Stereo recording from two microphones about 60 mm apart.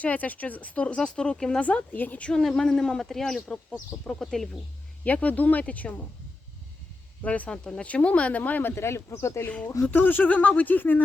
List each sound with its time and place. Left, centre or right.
0.0 s speech: left
2.3 s speech: centre
5.0 s speech: left
7.2 s speech: left
8.7 s speech: left
9.9 s speech: left